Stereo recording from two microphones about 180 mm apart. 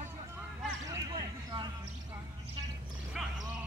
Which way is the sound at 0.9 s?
20° right (ahead or behind).